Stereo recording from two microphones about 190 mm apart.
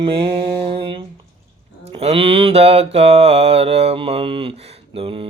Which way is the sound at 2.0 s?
30° right (ahead or behind).